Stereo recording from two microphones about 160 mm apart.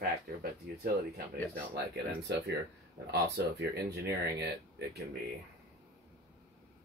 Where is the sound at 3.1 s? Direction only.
90° right.